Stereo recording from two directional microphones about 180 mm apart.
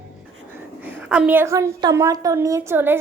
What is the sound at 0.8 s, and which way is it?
A woman's voice, 10° right (ahead or behind).